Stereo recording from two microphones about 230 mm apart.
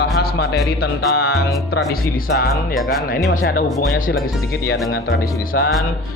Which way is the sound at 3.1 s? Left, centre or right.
Left.